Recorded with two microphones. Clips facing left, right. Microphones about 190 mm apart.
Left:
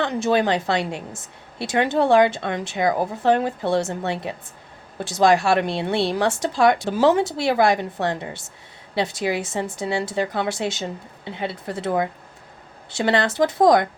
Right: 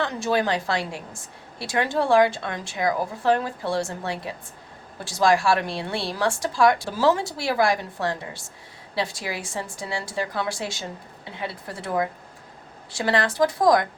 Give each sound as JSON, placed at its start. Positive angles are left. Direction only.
{"t": 0.0, "sound": "a woman's voice", "side_deg": 20}
{"t": 12.9, "sound": "a woman's voice", "side_deg": 25}